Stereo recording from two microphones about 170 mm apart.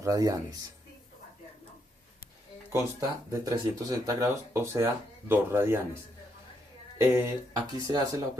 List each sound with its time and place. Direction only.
0.0 s speech: 20° right (ahead or behind)
3.3 s speech: 20° right (ahead or behind)
7.0 s speech: 20° right (ahead or behind)